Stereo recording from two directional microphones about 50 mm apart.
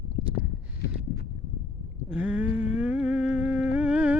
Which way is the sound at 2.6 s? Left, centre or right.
Right.